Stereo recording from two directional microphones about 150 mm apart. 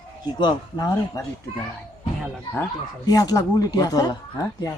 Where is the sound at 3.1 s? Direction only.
25° left (ahead or behind).